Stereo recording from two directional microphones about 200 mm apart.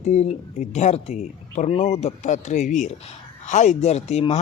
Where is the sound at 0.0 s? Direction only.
35° left (ahead or behind).